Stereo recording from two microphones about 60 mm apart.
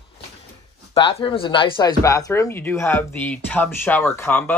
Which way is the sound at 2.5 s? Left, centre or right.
Left.